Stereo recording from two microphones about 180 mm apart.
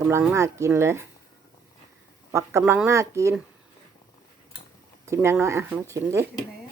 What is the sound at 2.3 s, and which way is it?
Speech, 15° right (ahead or behind).